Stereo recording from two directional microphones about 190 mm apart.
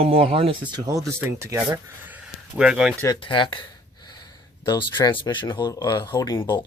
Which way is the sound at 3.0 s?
25° left (ahead or behind).